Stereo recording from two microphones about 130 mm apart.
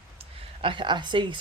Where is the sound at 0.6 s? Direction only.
40° right (ahead or behind).